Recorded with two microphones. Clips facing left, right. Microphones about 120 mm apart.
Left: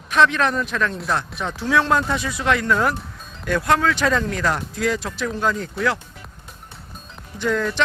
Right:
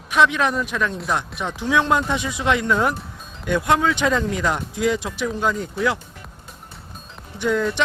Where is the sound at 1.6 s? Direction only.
15° right (ahead or behind).